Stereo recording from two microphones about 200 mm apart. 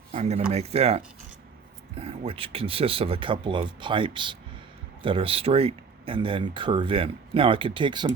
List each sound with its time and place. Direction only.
0.1 s speech: 30° right (ahead or behind)